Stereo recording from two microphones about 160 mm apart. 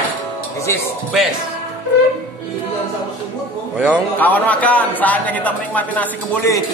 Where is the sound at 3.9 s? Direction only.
10° left (ahead or behind).